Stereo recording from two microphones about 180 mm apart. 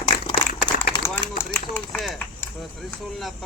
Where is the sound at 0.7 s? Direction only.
55° left (ahead or behind).